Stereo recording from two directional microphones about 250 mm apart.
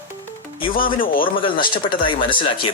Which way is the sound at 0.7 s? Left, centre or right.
Left.